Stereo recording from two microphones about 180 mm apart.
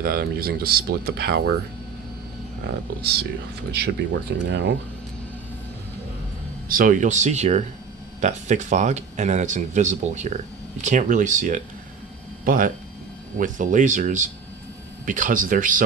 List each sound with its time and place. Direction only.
0.0 s speech: 55° right (ahead or behind)
2.6 s speech: 60° right (ahead or behind); by 4.7 s 85° right
6.7 s speech: 50° right (ahead or behind)